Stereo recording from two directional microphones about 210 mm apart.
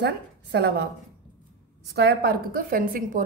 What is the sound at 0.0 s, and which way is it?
Speech, 50° right (ahead or behind).